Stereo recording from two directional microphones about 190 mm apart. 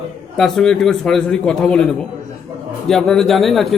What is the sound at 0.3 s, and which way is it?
A man's voice, centre (ahead or behind).